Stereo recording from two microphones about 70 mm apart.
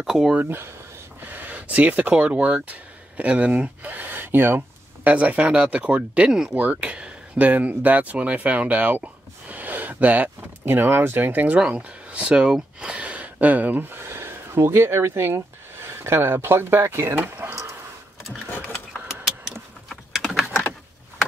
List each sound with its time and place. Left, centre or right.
0.0 s speech: centre
0.4 s speech: right
5.1 s speech: centre; by 17.6 s right
19.9 s typing: centre